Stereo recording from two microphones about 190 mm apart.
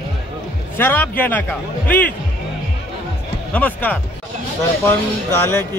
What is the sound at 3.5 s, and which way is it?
Speech, 10° left (ahead or behind).